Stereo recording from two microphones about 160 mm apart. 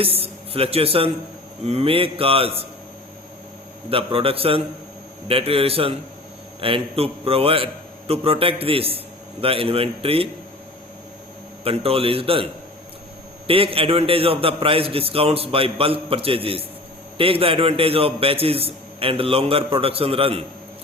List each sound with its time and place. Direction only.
0.0 s a man's voice: 35° right (ahead or behind)
3.8 s a man's voice: 35° right (ahead or behind)
11.6 s a man's voice: 35° right (ahead or behind)
13.5 s a man's voice: 35° right (ahead or behind)